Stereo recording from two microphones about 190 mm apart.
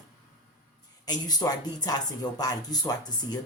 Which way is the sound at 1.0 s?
20° left (ahead or behind).